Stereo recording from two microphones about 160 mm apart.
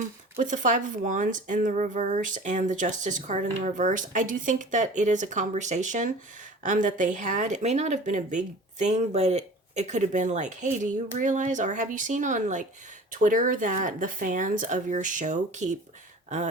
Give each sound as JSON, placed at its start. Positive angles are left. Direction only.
{"t": 0.3, "sound": "speech", "side_deg": -50}